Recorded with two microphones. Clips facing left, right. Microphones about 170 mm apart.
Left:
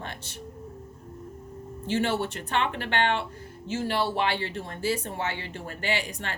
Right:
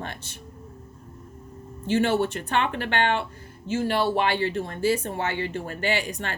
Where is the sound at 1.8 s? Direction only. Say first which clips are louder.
Right 4 dB; 50° right (ahead or behind).